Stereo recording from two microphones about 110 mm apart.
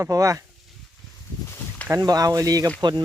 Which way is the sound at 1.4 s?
20° left (ahead or behind).